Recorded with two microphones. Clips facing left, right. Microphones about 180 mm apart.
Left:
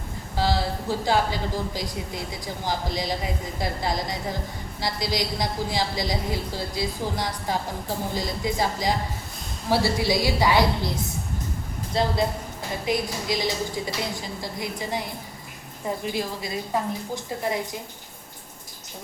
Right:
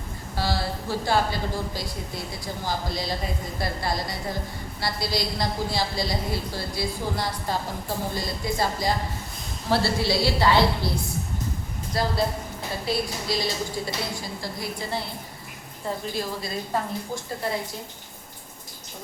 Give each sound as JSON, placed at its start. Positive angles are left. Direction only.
{"t": 0.3, "sound": "a woman's voice", "side_deg": 15}
{"t": 16.1, "sound": "a woman's voice", "side_deg": 15}